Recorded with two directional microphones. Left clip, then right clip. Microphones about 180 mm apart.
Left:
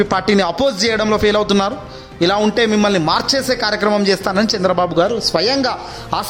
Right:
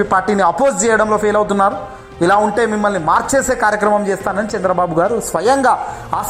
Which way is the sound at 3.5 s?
20° left (ahead or behind).